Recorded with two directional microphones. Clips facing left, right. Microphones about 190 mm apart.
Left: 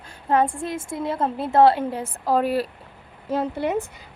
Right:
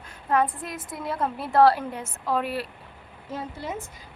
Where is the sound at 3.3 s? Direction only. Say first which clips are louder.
Left 10 dB; 65° left (ahead or behind).